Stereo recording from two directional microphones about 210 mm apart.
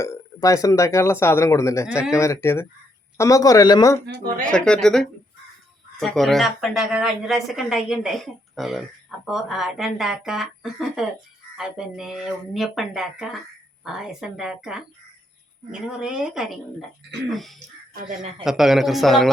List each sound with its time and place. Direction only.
0.0 s speech: 15° left (ahead or behind)
4.0 s speech: 50° right (ahead or behind)
4.5 s speech: 5° left (ahead or behind)